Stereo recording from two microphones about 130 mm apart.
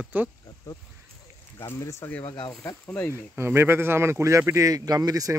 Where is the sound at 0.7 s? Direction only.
30° left (ahead or behind).